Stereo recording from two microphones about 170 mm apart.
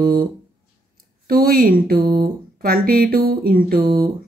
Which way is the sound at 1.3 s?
60° right (ahead or behind).